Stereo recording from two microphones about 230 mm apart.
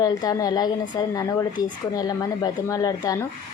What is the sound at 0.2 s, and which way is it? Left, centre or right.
A woman's voice, centre.